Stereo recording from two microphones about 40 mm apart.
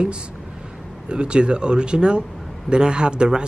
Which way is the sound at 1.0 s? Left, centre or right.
Right.